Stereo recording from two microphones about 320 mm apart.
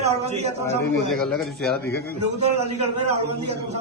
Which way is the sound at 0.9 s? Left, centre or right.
Centre.